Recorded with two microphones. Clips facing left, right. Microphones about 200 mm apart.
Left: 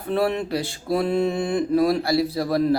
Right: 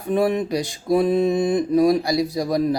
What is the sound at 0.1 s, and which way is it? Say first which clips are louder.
Speech: right 3 dB; 15° right (ahead or behind).